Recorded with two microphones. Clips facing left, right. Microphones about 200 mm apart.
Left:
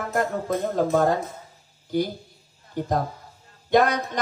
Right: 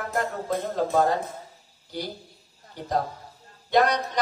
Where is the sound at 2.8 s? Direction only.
50° left (ahead or behind).